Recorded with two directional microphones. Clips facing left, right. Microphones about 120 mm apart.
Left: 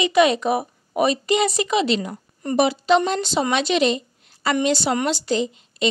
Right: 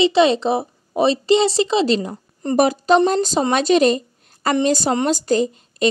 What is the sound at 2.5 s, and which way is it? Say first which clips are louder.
A woman's voice: right 3 dB; 45° right (ahead or behind).